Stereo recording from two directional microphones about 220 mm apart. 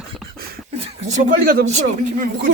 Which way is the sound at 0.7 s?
30° right (ahead or behind).